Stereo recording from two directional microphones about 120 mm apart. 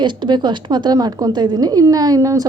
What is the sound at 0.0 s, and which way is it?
A woman's voice, 40° right (ahead or behind).